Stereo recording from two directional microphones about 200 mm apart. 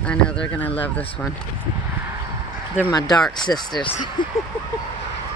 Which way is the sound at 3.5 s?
20° left (ahead or behind).